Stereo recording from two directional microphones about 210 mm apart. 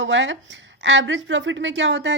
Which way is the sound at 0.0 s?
60° right (ahead or behind).